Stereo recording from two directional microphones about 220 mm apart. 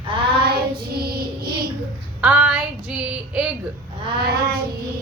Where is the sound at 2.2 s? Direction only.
5° right (ahead or behind).